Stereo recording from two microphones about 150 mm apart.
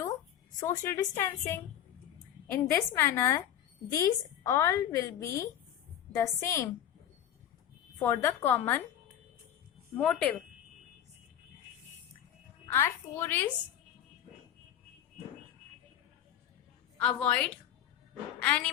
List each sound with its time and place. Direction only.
0.6 s a woman's voice: 20° left (ahead or behind)
7.9 s a woman's voice: 20° left (ahead or behind)
10.0 s a woman's voice: 5° left (ahead or behind)
12.7 s a woman's voice: 15° left (ahead or behind)
17.0 s a woman's voice: 10° left (ahead or behind)